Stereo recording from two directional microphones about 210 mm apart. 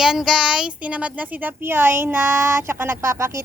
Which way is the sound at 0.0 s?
5° right (ahead or behind).